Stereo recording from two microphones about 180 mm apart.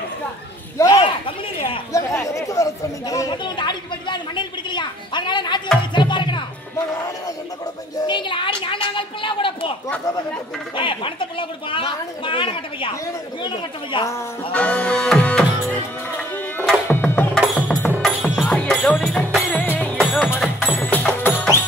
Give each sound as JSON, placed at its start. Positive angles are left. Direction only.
{"t": 0.7, "sound": "a sound", "side_deg": 20}
{"t": 1.9, "sound": "chatter", "side_deg": 15}
{"t": 5.9, "sound": "music", "side_deg": 25}
{"t": 8.1, "sound": "a woman's voice", "side_deg": 25}
{"t": 10.8, "sound": "speech", "side_deg": 30}
{"t": 13.9, "sound": "speech", "side_deg": 25}
{"t": 14.5, "sound": "music", "side_deg": 5}